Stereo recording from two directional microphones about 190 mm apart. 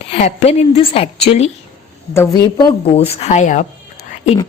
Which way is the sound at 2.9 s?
30° left (ahead or behind).